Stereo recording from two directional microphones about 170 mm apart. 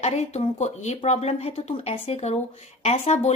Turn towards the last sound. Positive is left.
turn(degrees=40)  # may be behind; listen again after turning